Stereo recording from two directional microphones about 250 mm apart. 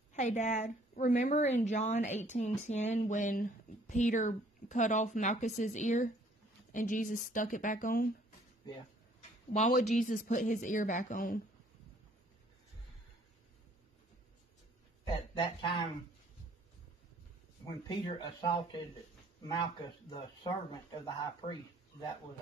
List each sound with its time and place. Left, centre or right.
0.1 s a woman's voice: left
9.5 s a woman's voice: left
15.3 s a woman's voice: centre
17.8 s speech: centre